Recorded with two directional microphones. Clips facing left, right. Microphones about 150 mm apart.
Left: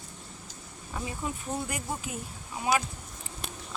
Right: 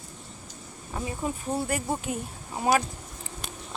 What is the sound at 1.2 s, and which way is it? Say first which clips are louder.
Speech: right 5 dB; 30° right (ahead or behind).